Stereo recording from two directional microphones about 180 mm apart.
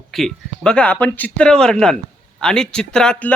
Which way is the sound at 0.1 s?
Centre (ahead or behind).